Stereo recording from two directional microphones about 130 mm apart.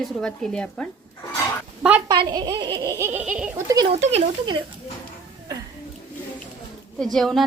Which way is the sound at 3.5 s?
25° right (ahead or behind).